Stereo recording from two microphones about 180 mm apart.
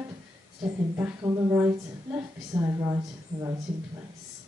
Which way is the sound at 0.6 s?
20° right (ahead or behind).